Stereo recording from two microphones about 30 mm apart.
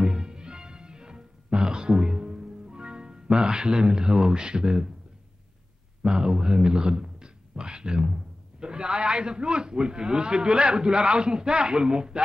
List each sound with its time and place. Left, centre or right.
0.0 s music: right
6.0 s a man's voice: right